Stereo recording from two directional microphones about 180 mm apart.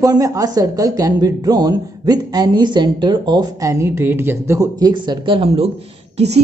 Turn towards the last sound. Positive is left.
turn(degrees=-35)  # may be behind; listen again after turning